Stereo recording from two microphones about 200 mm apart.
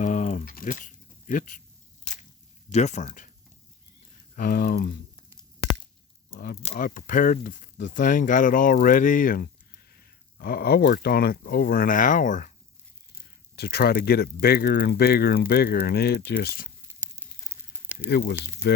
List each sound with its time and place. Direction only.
0.0 s music: 40° left (ahead or behind)
2.7 s speech: 35° left (ahead or behind)
4.4 s speech: 45° left (ahead or behind)
6.3 s speech: 50° left (ahead or behind)
6.6 s speech: 30° left (ahead or behind)
6.8 s speech: 45° left (ahead or behind)
13.6 s speech: 55° left (ahead or behind)
18.1 s speech: 55° left (ahead or behind)